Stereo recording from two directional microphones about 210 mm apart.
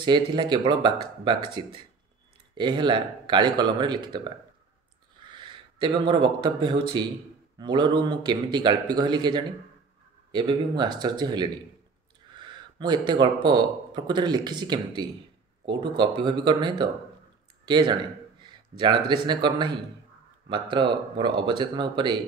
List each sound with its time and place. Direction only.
0.0 s a man's voice: 20° right (ahead or behind)
5.3 s a man's voice: 20° right (ahead or behind)
10.8 s a man's voice: 20° right (ahead or behind)